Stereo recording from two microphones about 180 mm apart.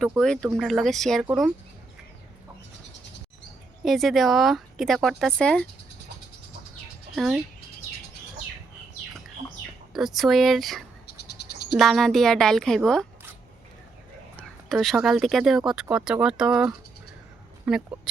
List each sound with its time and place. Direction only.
0.0 s speech: centre (ahead or behind)
3.8 s speech: centre (ahead or behind)
9.9 s speech: centre (ahead or behind)
11.0 s insect: 65° left (ahead or behind)
11.8 s speech: centre (ahead or behind)
14.3 s speech: centre (ahead or behind)